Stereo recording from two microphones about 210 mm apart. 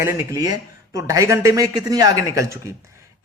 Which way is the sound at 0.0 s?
15° right (ahead or behind).